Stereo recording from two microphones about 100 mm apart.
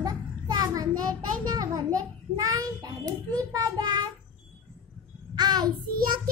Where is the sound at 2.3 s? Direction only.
40° right (ahead or behind).